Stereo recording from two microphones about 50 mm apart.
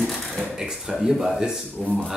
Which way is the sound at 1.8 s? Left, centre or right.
Centre.